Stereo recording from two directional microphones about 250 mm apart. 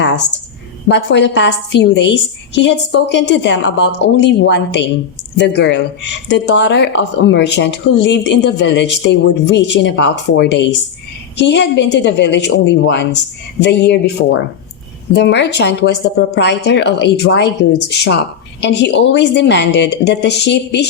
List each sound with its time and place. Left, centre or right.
0.9 s speech: left